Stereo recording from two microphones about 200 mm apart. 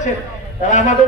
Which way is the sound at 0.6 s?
40° left (ahead or behind).